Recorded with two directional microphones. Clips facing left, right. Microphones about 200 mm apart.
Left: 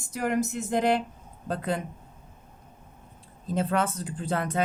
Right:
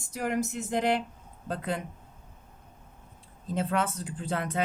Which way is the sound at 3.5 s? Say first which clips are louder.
Left 2 dB; 40° left (ahead or behind).